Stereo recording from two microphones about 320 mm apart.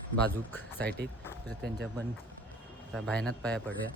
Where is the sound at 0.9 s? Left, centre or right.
Right.